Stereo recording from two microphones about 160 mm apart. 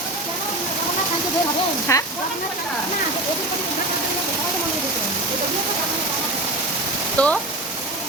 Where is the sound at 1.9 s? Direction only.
20° left (ahead or behind).